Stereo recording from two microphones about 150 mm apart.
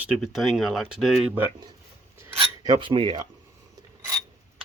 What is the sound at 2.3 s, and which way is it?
Cutlery, 30° right (ahead or behind).